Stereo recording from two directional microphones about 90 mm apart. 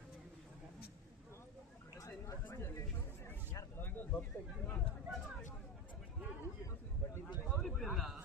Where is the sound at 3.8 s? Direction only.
20° left (ahead or behind).